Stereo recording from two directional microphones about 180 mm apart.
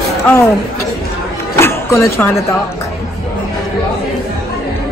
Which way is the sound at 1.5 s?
15° left (ahead or behind).